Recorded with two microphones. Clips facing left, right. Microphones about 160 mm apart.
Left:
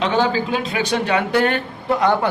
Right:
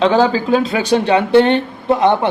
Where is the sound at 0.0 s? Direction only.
35° right (ahead or behind).